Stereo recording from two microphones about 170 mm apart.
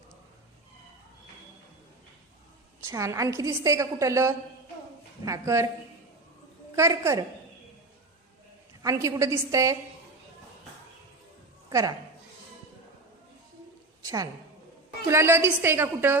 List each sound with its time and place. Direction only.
2.8 s a woman's voice: 20° right (ahead or behind)
6.7 s a woman's voice: 15° right (ahead or behind)
8.8 s a woman's voice: 20° right (ahead or behind)
11.7 s a woman's voice: 20° right (ahead or behind)
14.0 s a woman's voice: 20° right (ahead or behind)